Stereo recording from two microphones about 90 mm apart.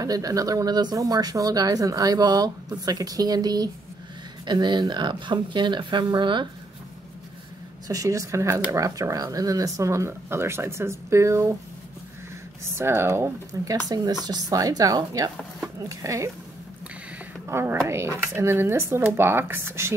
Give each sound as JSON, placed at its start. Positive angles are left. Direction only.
{"t": 0.0, "sound": "speech", "side_deg": -40}
{"t": 7.9, "sound": "speech", "side_deg": -40}
{"t": 12.6, "sound": "speech", "side_deg": -30}
{"t": 15.9, "sound": "speech", "side_deg": -35}
{"t": 17.5, "sound": "speech", "side_deg": -30}